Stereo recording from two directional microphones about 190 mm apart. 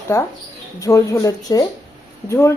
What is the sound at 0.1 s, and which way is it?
Speech, 10° left (ahead or behind).